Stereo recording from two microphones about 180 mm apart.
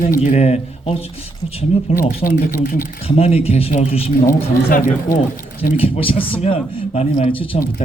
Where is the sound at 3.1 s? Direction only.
35° left (ahead or behind).